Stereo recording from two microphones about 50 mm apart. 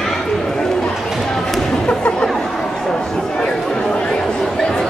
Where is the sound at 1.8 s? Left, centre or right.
Left.